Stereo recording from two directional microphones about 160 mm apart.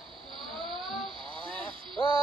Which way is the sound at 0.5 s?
Centre (ahead or behind).